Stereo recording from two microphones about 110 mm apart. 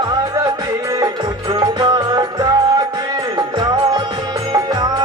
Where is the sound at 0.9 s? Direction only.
40° right (ahead or behind).